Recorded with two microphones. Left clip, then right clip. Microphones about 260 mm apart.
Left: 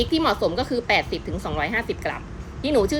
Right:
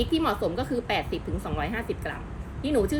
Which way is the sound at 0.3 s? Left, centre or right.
Centre.